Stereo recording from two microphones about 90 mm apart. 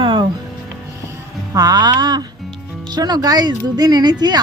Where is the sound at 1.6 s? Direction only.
50° right (ahead or behind).